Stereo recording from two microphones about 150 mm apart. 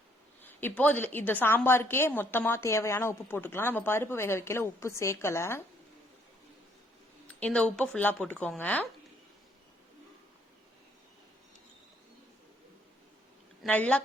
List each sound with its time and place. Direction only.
0.8 s a woman's voice: 10° left (ahead or behind)
7.3 s a woman's voice: 10° left (ahead or behind)
13.7 s a woman's voice: 10° left (ahead or behind)